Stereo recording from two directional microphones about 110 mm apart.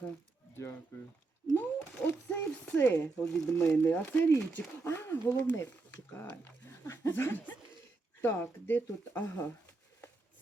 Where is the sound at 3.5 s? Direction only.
20° left (ahead or behind).